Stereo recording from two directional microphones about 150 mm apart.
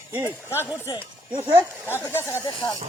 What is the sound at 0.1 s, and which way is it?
Speech, 20° right (ahead or behind).